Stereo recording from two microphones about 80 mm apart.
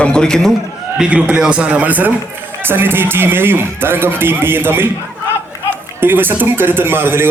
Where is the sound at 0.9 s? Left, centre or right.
Centre.